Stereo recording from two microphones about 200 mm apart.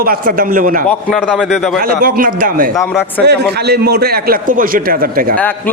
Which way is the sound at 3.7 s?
50° right (ahead or behind).